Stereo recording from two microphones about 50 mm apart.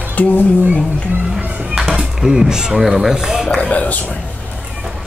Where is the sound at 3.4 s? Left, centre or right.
Left.